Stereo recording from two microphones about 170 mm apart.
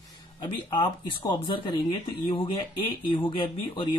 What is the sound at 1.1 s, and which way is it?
Speech, 30° left (ahead or behind).